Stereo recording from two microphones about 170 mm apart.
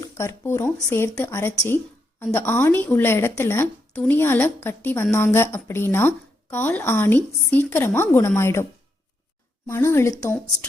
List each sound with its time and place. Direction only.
0.0 s speech: 15° left (ahead or behind)
9.6 s speech: 15° left (ahead or behind)